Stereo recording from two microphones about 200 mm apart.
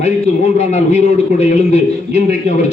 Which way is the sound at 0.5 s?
35° left (ahead or behind).